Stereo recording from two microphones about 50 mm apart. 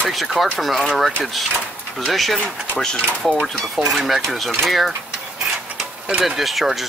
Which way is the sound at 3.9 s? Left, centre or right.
Centre.